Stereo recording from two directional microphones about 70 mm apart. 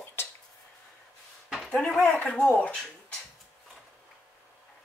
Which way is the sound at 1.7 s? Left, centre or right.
Centre.